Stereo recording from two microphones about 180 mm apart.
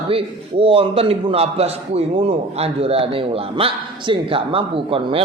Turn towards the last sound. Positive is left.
turn(degrees=-30)  # may be behind; listen again after turning